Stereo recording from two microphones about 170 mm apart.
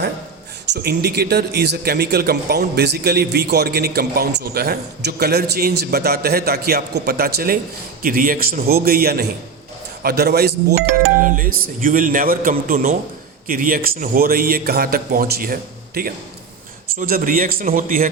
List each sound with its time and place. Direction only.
0.6 s a man's voice: 80° right
11.1 s speech: 50° right (ahead or behind)
17.0 s speech: 55° right (ahead or behind)